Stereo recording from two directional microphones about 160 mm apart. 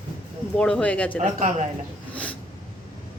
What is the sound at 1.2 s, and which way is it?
Speech, 50° right (ahead or behind).